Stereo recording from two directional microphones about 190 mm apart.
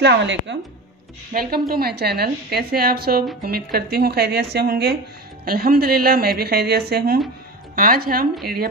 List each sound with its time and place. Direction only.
0.0 s a woman's voice: 70° right (ahead or behind)
1.3 s a woman's voice: 50° right (ahead or behind)